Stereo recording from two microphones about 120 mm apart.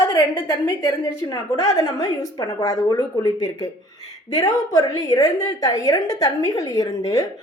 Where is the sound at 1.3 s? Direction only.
25° left (ahead or behind).